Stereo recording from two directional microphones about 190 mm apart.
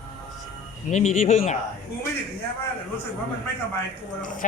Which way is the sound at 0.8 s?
40° left (ahead or behind).